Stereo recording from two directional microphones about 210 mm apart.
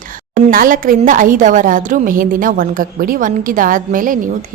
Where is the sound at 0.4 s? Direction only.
40° right (ahead or behind).